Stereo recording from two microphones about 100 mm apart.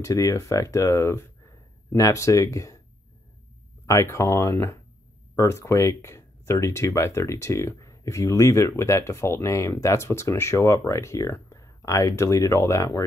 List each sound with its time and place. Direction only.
0.0 s speech: 35° left (ahead or behind)
3.8 s speech: 30° left (ahead or behind)